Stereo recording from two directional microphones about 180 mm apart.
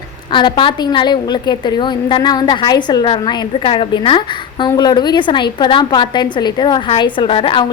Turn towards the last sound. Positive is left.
turn(degrees=30)  # may be behind; listen again after turning